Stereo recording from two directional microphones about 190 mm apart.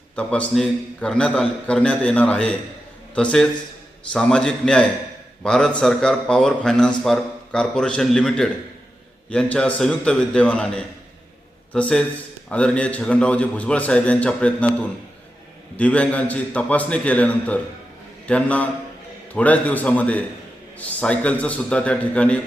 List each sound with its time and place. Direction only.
0.2 s a man's voice: 5° left (ahead or behind)
4.1 s a man's voice: 5° left (ahead or behind)